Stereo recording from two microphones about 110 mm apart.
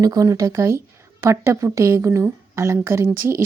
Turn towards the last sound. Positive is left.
turn(degrees=-25)  # may be behind; listen again after turning